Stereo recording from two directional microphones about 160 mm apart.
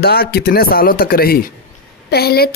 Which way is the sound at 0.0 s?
75° left (ahead or behind).